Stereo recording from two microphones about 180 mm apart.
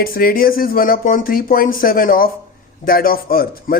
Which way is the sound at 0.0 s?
55° left (ahead or behind).